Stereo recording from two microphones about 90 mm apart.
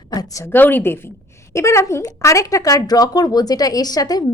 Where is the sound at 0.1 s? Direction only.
40° left (ahead or behind).